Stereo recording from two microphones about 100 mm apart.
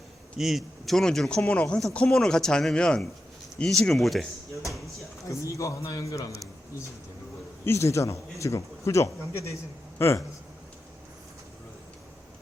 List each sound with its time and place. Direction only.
0.3 s speech: centre (ahead or behind)
5.3 s a man's voice: 30° left (ahead or behind)
7.6 s speech: 25° left (ahead or behind)